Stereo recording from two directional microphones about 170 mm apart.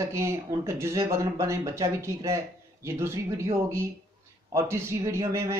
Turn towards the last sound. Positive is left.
turn(degrees=-15)  # may be behind; listen again after turning